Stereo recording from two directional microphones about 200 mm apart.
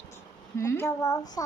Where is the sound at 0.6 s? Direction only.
15° left (ahead or behind).